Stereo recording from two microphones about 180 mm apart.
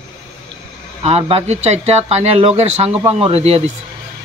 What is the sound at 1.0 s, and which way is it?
Speech, 35° right (ahead or behind).